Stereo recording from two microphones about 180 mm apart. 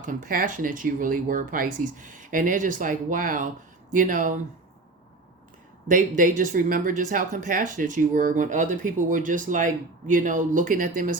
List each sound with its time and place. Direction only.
0.0 s speech: 50° right (ahead or behind)
5.9 s speech: 45° right (ahead or behind)